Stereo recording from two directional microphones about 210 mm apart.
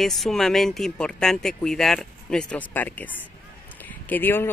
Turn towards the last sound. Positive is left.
turn(degrees=10)  # may be behind; listen again after turning